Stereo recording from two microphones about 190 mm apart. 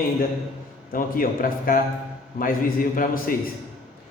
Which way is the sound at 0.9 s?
45° left (ahead or behind).